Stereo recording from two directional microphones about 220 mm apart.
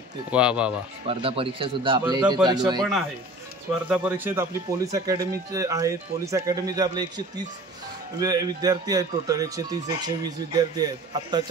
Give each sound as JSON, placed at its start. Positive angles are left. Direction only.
{"t": 0.3, "sound": "speech", "side_deg": -5}
{"t": 1.0, "sound": "a man's voice", "side_deg": -25}
{"t": 2.8, "sound": "speech", "side_deg": 0}